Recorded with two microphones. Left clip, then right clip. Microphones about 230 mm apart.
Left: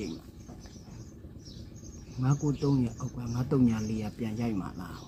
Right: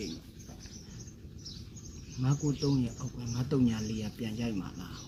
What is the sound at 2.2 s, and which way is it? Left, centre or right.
Speech, centre.